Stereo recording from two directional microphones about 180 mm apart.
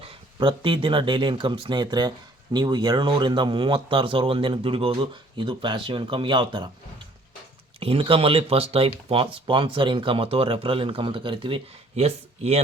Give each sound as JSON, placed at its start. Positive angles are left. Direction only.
{"t": 0.0, "sound": "speech", "side_deg": -30}
{"t": 7.8, "sound": "speech", "side_deg": -30}